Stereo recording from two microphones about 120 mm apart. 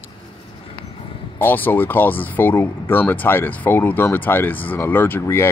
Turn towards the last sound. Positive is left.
turn(degrees=20)  # may be behind; listen again after turning